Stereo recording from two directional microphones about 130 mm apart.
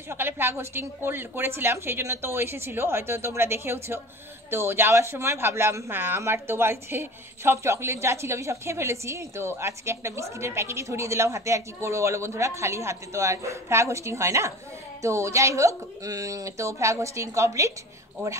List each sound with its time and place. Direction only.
0.1 s a woman's voice: 15° right (ahead or behind)